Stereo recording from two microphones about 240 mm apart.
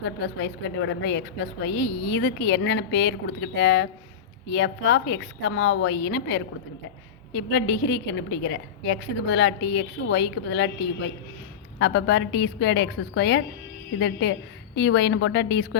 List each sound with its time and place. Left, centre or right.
0.0 s a woman's voice: left
11.8 s a woman's voice: left